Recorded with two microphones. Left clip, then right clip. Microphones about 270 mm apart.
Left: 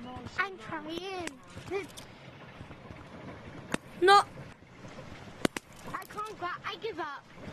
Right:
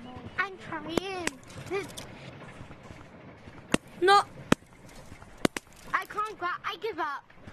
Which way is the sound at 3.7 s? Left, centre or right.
Centre.